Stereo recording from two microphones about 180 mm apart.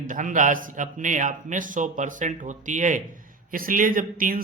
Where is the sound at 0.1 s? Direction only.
45° right (ahead or behind).